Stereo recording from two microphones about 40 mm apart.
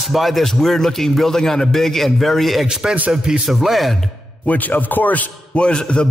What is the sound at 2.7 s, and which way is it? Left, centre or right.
Speech, centre.